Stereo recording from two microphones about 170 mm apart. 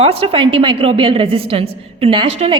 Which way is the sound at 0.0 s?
35° right (ahead or behind).